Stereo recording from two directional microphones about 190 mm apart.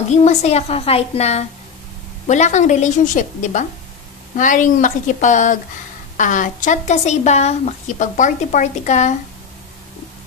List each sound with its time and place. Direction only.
0.1 s a woman's voice: 35° left (ahead or behind)